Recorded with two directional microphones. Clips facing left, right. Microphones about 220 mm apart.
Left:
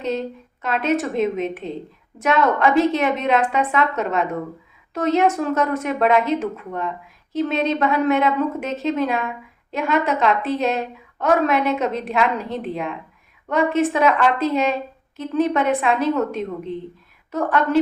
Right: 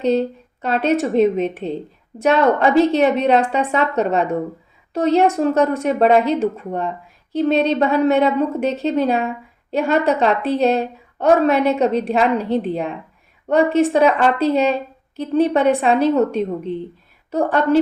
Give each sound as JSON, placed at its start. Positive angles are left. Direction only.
{"t": 0.0, "sound": "a woman's voice", "side_deg": -35}